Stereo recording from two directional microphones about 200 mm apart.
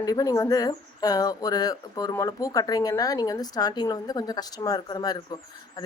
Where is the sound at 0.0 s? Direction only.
15° left (ahead or behind).